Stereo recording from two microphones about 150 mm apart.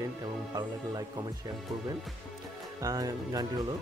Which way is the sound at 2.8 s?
25° right (ahead or behind).